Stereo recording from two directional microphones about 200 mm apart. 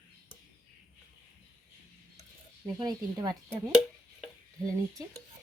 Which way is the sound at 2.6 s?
20° right (ahead or behind).